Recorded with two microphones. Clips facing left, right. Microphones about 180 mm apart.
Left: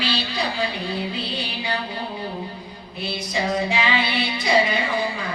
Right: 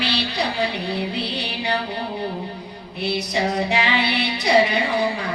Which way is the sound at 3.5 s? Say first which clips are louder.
Right 1 dB; 65° right (ahead or behind).